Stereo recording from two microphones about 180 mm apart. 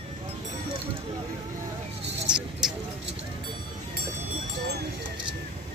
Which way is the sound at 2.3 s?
5° right (ahead or behind).